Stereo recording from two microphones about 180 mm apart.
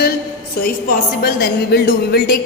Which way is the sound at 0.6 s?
55° left (ahead or behind).